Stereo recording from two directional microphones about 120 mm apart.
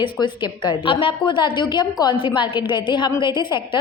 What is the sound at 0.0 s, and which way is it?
A woman's voice, 40° left (ahead or behind).